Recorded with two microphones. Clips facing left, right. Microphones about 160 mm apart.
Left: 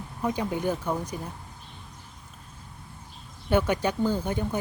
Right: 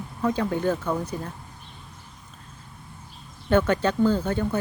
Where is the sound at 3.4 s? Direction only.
10° left (ahead or behind).